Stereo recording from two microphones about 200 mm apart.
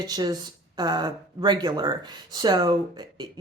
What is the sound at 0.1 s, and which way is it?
Speech, 20° right (ahead or behind).